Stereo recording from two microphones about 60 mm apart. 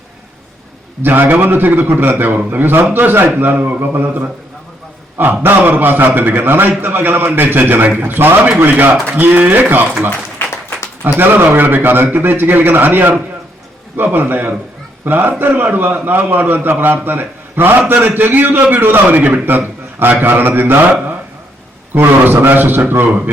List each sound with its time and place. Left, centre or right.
1.0 s a man's voice: right
10.3 s applause: left
11.0 s a man's voice: right
21.9 s a man's voice: right